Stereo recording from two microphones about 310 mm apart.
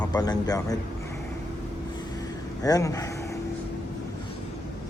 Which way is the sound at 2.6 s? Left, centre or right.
Centre.